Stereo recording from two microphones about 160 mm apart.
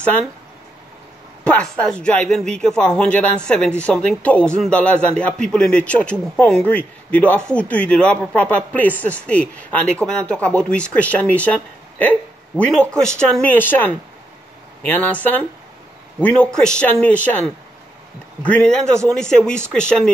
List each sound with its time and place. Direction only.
1.4 s speech: 10° left (ahead or behind)
18.4 s speech: 5° left (ahead or behind)